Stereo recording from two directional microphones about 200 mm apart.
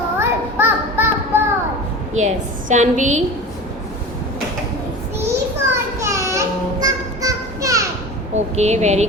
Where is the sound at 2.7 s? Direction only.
35° right (ahead or behind).